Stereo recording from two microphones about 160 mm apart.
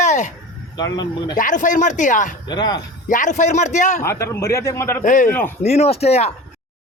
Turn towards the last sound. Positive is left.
turn(degrees=40)  # may be behind; listen again after turning